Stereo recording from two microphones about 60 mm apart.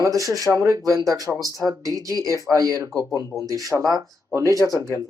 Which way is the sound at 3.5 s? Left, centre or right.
Right.